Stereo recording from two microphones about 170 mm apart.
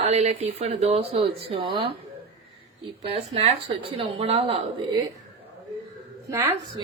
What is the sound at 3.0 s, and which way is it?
Speech, 35° right (ahead or behind).